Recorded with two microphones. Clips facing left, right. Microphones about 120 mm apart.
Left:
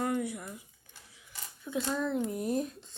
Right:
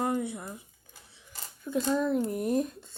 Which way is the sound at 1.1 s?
35° right (ahead or behind).